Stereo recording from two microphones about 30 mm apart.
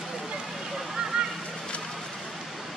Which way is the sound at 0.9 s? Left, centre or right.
Right.